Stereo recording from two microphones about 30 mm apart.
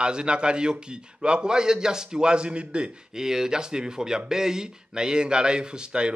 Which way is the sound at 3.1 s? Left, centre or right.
Centre.